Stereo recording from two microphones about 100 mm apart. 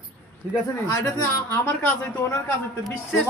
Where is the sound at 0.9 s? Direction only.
25° left (ahead or behind).